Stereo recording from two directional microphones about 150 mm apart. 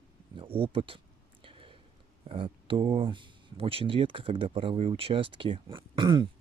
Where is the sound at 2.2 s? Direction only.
35° right (ahead or behind).